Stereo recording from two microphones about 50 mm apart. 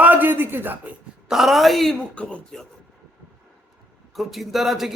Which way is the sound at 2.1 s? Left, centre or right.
Left.